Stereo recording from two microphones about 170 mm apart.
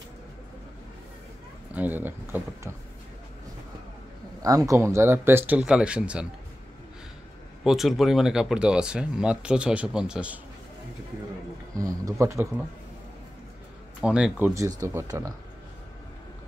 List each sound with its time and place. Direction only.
1.8 s speech: 10° right (ahead or behind)
4.6 s speech: 15° right (ahead or behind)
7.6 s speech: centre (ahead or behind)
11.7 s speech: 20° right (ahead or behind)
14.0 s speech: 5° right (ahead or behind)